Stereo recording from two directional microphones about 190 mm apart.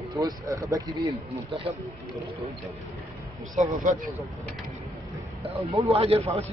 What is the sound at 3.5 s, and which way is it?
Speech, 40° right (ahead or behind).